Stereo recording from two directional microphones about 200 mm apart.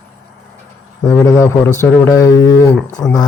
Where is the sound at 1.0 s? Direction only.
10° left (ahead or behind).